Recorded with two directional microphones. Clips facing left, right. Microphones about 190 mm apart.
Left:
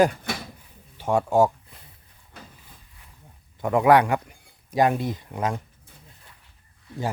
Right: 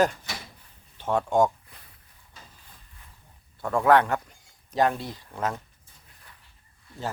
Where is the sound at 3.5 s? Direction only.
15° left (ahead or behind).